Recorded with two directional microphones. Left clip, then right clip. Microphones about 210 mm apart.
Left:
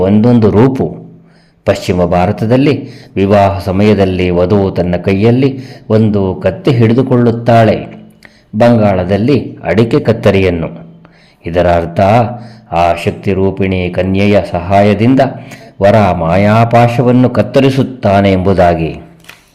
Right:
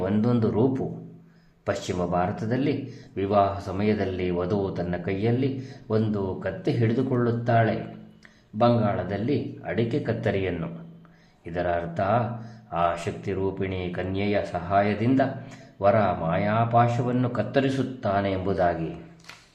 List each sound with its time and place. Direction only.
0.0 s a man's voice: 35° left (ahead or behind)